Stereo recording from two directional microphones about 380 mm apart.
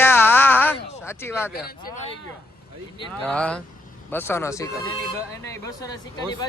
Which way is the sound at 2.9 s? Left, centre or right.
Centre.